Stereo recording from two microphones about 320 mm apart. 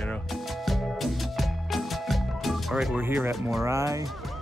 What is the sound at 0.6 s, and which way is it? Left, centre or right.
Music, centre.